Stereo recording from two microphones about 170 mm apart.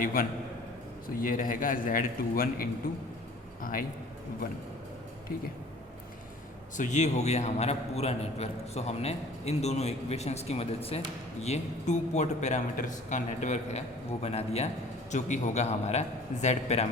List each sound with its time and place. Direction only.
0.0 s a man's voice: 55° left (ahead or behind)
6.7 s a man's voice: 45° left (ahead or behind)